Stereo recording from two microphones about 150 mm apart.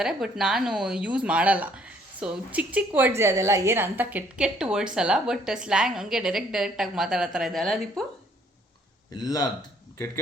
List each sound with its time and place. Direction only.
0.0 s speech: 5° right (ahead or behind)
9.1 s speech: 25° left (ahead or behind)